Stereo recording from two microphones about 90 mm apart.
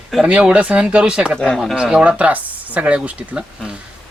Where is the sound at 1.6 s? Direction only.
5° right (ahead or behind).